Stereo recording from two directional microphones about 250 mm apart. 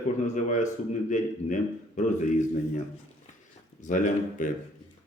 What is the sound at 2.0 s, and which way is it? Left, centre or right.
Speech, left.